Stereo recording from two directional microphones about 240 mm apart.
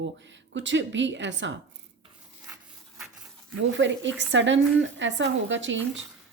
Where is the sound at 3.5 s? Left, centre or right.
Right.